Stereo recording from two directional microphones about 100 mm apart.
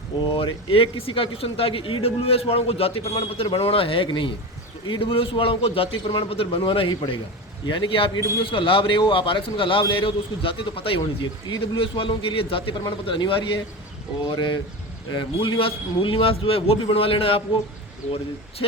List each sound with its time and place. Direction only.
0.2 s a man's voice: 60° left (ahead or behind)
18.0 s speech: 90° left